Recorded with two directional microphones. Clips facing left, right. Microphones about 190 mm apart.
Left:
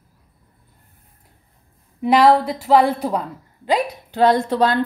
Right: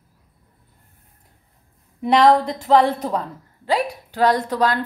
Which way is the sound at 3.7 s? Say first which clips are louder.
Left 1 dB; 20° left (ahead or behind).